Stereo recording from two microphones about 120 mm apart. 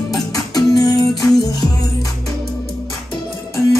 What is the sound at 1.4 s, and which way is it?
Music, 35° left (ahead or behind).